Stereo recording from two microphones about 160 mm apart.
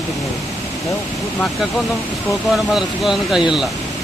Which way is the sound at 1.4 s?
Centre (ahead or behind).